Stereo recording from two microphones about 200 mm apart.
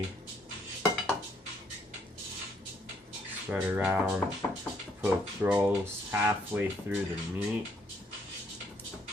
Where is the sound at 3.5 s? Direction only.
10° right (ahead or behind).